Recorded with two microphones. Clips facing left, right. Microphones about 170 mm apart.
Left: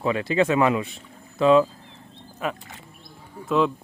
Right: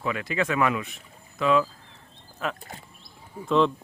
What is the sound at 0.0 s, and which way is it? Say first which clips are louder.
Speech: left 6 dB; 30° left (ahead or behind).